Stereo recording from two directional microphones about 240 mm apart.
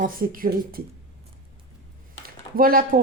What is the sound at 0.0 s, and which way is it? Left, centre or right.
Speech, right.